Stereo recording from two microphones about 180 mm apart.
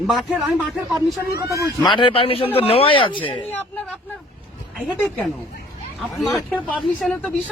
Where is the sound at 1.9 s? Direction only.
30° left (ahead or behind).